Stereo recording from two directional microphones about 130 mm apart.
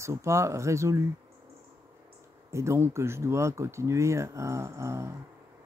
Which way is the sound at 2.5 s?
20° right (ahead or behind).